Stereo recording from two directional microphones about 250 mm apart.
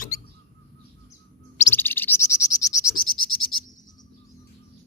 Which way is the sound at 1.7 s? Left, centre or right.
Centre.